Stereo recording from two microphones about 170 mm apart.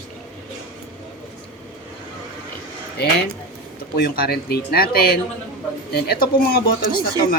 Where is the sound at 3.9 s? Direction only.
65° left (ahead or behind).